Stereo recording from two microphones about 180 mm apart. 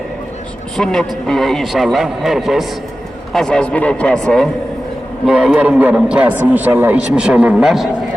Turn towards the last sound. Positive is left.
turn(degrees=0)  # may be behind; listen again after turning